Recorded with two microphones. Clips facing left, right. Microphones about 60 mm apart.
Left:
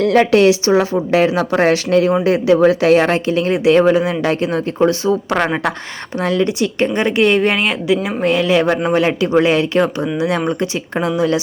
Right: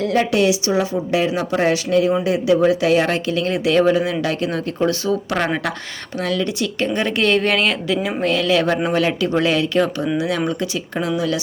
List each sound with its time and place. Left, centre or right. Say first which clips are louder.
0.0 s speech: left 6 dB; left